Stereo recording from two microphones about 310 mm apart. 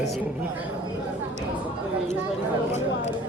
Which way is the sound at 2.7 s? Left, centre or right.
Left.